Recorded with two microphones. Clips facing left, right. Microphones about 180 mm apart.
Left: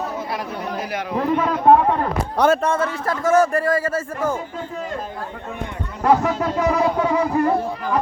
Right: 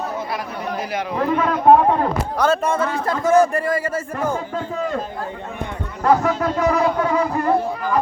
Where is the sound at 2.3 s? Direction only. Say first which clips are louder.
Left 2 dB; 15° left (ahead or behind).